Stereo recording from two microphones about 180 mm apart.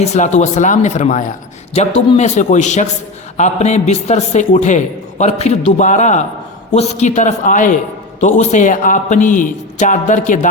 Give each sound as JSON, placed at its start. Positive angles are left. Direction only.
{"t": 0.0, "sound": "a man's voice", "side_deg": 40}